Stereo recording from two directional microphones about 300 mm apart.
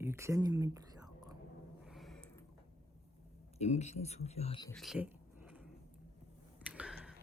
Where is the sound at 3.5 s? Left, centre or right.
Left.